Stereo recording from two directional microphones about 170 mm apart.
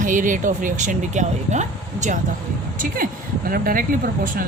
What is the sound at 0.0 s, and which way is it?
Speech, 50° right (ahead or behind).